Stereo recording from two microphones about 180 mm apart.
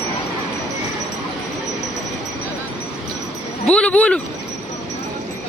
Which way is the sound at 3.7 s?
5° left (ahead or behind).